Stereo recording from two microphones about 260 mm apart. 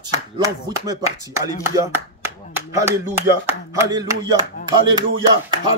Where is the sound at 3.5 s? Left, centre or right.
Centre.